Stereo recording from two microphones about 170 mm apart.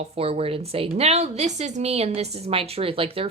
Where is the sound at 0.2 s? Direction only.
35° right (ahead or behind).